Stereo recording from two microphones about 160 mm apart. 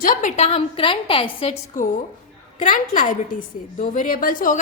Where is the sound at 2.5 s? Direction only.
55° left (ahead or behind).